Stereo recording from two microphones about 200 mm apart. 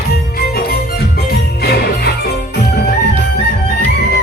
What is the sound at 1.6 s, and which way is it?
Music, 50° left (ahead or behind).